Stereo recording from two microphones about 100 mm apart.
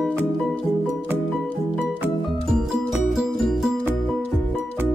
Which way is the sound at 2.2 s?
Centre (ahead or behind).